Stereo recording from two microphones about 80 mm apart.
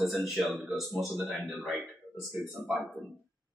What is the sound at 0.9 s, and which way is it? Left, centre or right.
Speech, right.